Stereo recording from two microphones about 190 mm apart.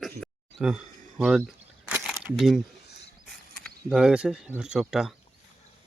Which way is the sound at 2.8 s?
60° left (ahead or behind).